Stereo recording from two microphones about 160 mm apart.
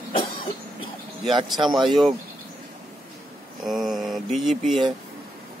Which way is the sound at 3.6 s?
Centre (ahead or behind).